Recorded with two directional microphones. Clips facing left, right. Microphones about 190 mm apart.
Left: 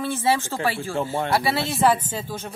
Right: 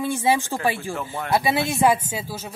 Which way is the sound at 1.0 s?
25° left (ahead or behind).